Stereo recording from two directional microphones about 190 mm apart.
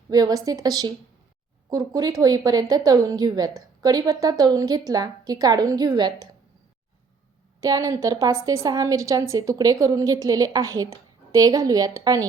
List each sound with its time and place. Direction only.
0.1 s a woman's voice: 20° right (ahead or behind)
7.6 s a woman's voice: 20° right (ahead or behind)